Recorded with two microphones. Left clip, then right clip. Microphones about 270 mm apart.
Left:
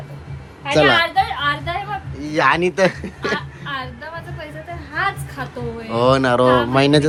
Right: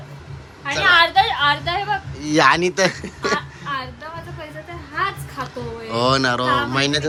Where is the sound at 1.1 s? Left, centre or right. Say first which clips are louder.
Right 2 dB; right.